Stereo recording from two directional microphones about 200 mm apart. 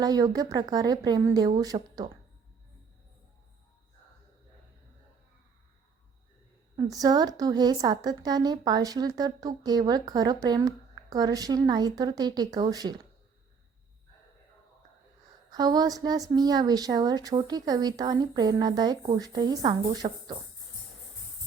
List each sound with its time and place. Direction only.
0.0 s a woman's voice: 20° right (ahead or behind)
6.7 s a woman's voice: 15° right (ahead or behind)
15.4 s a woman's voice: 20° right (ahead or behind)